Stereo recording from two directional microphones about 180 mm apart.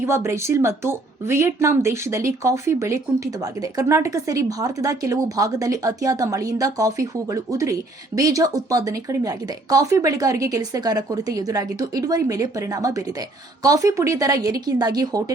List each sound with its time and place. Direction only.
0.0 s speech: 15° right (ahead or behind)